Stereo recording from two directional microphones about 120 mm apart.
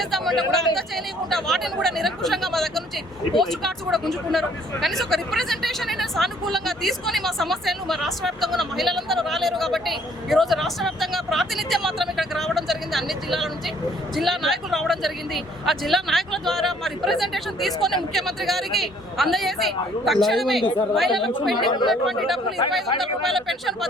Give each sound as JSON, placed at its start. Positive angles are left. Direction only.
{"t": 0.0, "sound": "speech", "side_deg": 0}
{"t": 21.6, "sound": "speech", "side_deg": 40}
{"t": 21.8, "sound": "speech", "side_deg": 0}